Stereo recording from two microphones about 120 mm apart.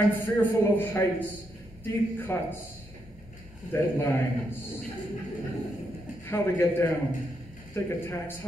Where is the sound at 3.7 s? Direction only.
25° left (ahead or behind).